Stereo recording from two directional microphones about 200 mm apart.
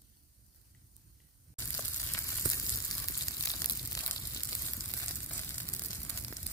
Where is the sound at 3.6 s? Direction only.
15° left (ahead or behind).